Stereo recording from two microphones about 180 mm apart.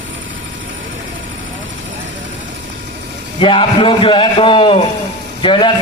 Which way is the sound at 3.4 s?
30° left (ahead or behind).